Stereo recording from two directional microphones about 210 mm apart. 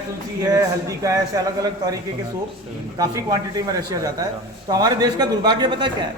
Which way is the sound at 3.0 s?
15° right (ahead or behind).